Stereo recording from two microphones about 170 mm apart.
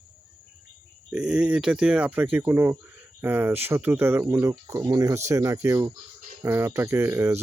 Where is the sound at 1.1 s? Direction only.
5° right (ahead or behind).